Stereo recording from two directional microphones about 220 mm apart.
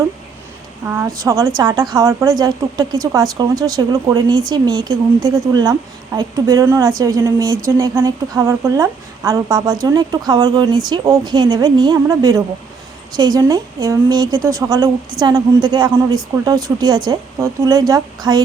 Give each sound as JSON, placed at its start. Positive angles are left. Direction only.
{"t": 0.9, "sound": "a woman's voice", "side_deg": -10}